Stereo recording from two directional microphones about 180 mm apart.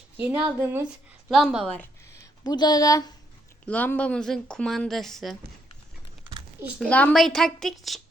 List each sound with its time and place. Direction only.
0.3 s speech: 15° right (ahead or behind)
1.3 s a woman's voice: centre (ahead or behind)
1.8 s a sound: 20° left (ahead or behind)
3.7 s a woman's voice: 10° left (ahead or behind)
6.8 s a woman's voice: 5° left (ahead or behind)